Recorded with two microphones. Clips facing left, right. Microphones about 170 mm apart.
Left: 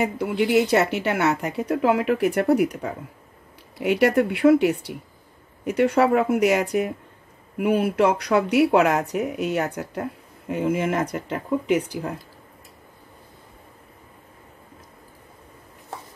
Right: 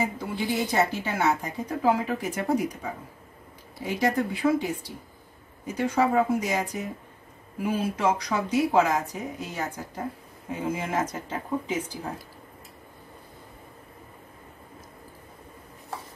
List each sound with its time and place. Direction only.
0.0 s speech: 70° left (ahead or behind)